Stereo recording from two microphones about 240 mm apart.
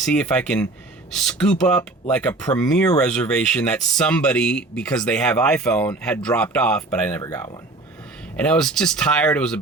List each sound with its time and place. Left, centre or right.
0.0 s speech: centre
7.1 s speech: centre
8.4 s speech: centre